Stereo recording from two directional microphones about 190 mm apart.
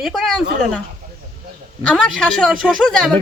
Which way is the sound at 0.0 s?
Centre (ahead or behind).